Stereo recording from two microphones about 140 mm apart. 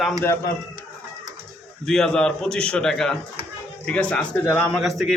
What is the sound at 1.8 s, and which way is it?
A man's voice, 5° left (ahead or behind).